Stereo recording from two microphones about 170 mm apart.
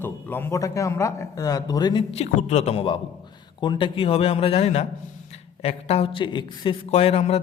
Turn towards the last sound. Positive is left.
turn(degrees=35)  # may be behind; listen again after turning